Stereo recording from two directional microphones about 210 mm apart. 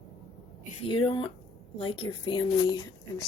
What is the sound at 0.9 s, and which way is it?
A woman's voice, 25° left (ahead or behind).